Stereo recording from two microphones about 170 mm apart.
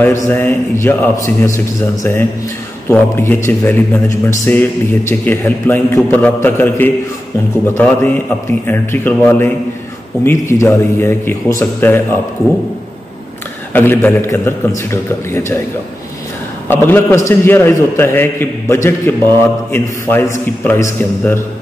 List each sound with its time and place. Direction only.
0.2 s a man's voice: 10° left (ahead or behind)
13.7 s a man's voice: 10° left (ahead or behind)
16.6 s a man's voice: 10° left (ahead or behind)